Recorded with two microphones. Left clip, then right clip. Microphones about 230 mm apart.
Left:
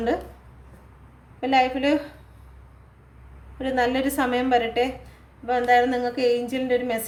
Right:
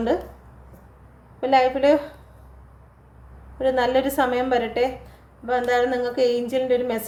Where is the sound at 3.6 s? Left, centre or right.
Left.